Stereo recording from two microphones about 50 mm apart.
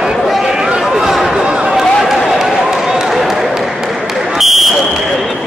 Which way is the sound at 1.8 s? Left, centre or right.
Centre.